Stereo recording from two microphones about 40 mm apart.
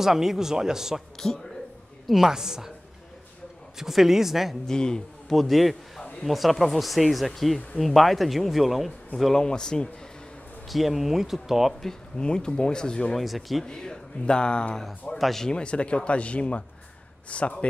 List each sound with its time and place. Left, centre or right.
0.0 s speech: centre
1.2 s speech: left
2.0 s speech: centre
3.7 s speech: centre
4.6 s speech: centre
5.3 s a man's voice: centre
9.4 s speech: centre
10.7 s speech: centre
12.2 s speech: left
13.2 s speech: centre
13.7 s speech: centre
15.1 s speech: centre
15.4 s a man's voice: left